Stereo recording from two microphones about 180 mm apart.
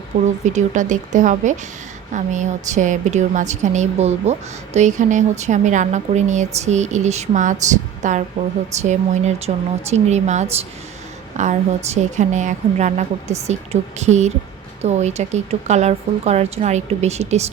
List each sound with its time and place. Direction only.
0.1 s a woman's voice: 45° right (ahead or behind)